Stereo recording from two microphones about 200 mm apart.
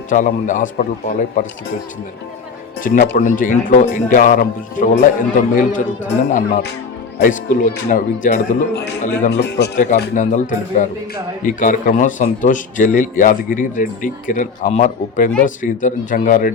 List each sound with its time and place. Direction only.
0.1 s a man's voice: 40° left (ahead or behind)
2.8 s a man's voice: 45° left (ahead or behind)
9.3 s a man's voice: 60° left (ahead or behind)
9.7 s a man's voice: 40° left (ahead or behind)